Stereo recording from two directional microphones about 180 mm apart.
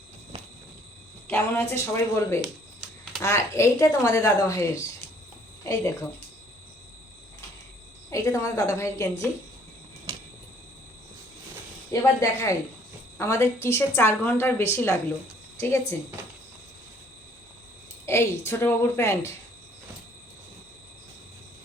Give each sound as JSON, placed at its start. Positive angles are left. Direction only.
{"t": 1.3, "sound": "a woman's voice", "side_deg": 15}
{"t": 8.1, "sound": "a woman's voice", "side_deg": 15}
{"t": 11.9, "sound": "a woman's voice", "side_deg": 15}
{"t": 18.0, "sound": "a woman's voice", "side_deg": 15}